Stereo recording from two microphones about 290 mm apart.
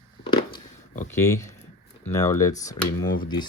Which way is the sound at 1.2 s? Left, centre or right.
Centre.